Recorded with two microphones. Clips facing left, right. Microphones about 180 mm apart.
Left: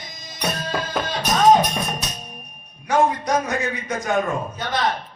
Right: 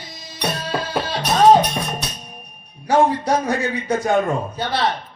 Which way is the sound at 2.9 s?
30° right (ahead or behind).